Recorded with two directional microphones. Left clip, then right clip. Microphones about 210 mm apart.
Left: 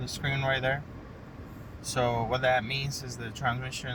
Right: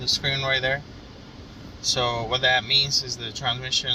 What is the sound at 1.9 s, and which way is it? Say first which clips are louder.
Speech: right 4 dB; 5° left (ahead or behind).